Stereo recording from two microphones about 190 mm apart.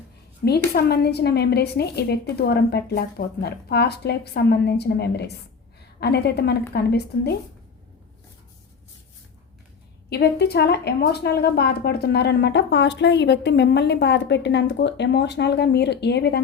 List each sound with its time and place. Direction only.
0.4 s a woman's voice: 55° left (ahead or behind)
10.1 s a woman's voice: 55° left (ahead or behind)